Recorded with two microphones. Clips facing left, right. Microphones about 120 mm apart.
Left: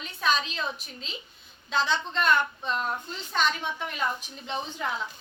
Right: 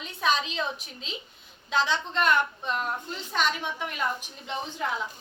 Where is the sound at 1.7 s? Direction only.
15° right (ahead or behind).